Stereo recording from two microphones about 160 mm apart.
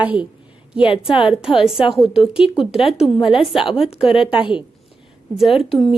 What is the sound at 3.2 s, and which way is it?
A woman's voice, 35° left (ahead or behind).